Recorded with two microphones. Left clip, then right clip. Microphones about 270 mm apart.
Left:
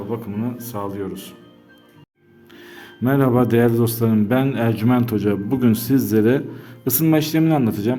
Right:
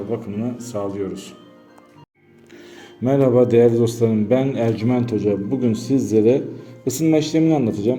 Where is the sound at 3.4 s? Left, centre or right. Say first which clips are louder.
Right 3 dB; centre.